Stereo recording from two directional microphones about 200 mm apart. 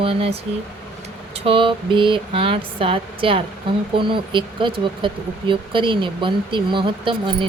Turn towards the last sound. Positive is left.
turn(degrees=-25)  # may be behind; listen again after turning